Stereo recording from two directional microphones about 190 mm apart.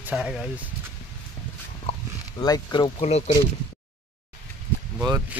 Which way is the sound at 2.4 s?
20° left (ahead or behind).